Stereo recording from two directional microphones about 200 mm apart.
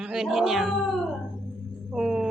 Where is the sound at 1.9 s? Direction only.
5° right (ahead or behind).